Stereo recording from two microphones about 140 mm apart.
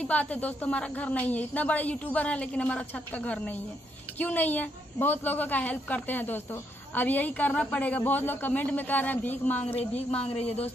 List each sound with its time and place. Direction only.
0.0 s a woman's voice: 10° left (ahead or behind)
10.2 s speech: 45° left (ahead or behind)